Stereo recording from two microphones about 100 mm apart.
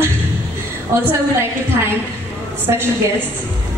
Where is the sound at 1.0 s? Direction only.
25° right (ahead or behind).